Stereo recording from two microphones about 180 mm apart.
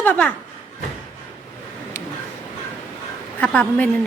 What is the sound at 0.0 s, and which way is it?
Speech, 10° left (ahead or behind).